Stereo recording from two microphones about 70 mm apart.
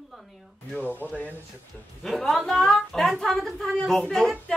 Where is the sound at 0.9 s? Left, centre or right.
Left.